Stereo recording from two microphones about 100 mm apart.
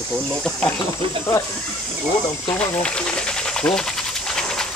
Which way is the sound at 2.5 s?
15° left (ahead or behind).